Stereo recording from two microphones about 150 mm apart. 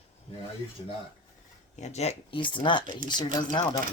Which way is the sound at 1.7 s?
50° left (ahead or behind).